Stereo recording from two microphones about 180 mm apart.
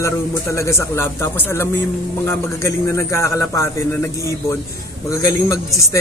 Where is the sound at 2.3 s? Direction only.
15° left (ahead or behind).